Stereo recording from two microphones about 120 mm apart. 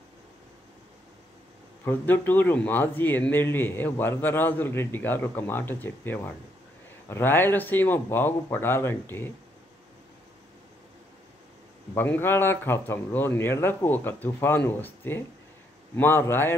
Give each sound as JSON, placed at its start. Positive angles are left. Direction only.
{"t": 1.9, "sound": "speech", "side_deg": 15}
{"t": 11.9, "sound": "a man's voice", "side_deg": 20}